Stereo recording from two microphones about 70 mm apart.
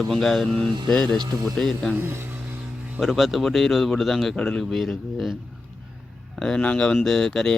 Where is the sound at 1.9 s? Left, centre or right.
Right.